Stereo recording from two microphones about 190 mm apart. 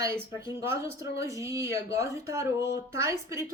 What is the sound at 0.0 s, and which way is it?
A woman's voice, 15° right (ahead or behind).